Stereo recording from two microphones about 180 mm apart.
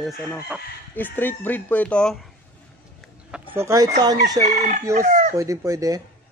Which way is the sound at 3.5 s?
15° right (ahead or behind).